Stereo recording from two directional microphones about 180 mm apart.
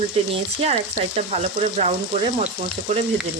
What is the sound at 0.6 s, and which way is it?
Speech, 35° right (ahead or behind).